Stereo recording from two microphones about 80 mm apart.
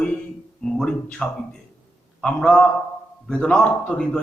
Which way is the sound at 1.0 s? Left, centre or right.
Centre.